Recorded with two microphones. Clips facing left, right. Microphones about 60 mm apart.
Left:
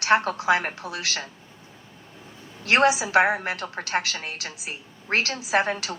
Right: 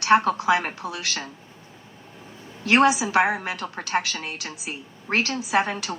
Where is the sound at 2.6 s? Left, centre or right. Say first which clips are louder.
Right 2 dB; left.